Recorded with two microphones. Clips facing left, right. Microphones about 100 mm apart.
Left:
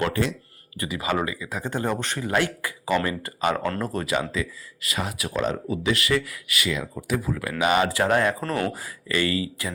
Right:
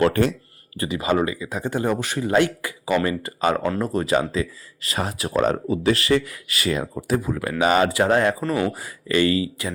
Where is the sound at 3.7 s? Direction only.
15° right (ahead or behind).